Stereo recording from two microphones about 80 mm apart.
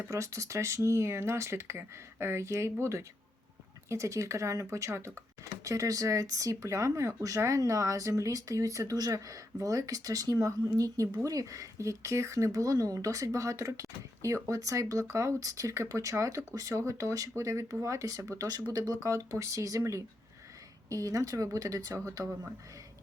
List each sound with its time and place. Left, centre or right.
0.0 s speech: right